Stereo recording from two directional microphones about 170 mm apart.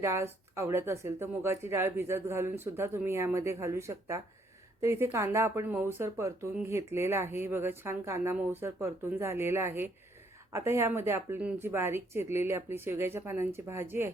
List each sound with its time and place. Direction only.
0.0 s speech: 15° right (ahead or behind)